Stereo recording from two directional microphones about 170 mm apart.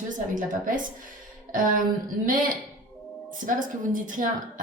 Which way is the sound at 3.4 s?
50° right (ahead or behind).